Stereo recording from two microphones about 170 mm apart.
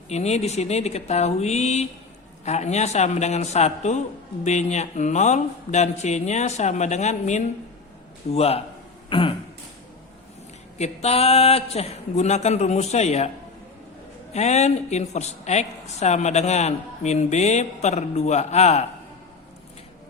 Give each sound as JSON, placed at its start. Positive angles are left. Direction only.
{"t": 0.1, "sound": "speech", "side_deg": 40}
{"t": 9.0, "sound": "a sound", "side_deg": 30}
{"t": 10.8, "sound": "speech", "side_deg": 40}
{"t": 14.3, "sound": "speech", "side_deg": 40}